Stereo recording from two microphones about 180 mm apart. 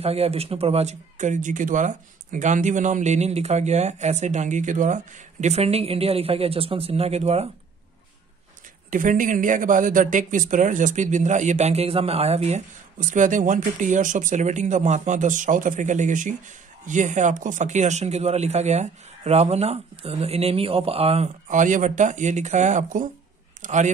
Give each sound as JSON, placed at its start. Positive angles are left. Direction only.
{"t": 0.0, "sound": "speech", "side_deg": -35}
{"t": 8.9, "sound": "a man's voice", "side_deg": -45}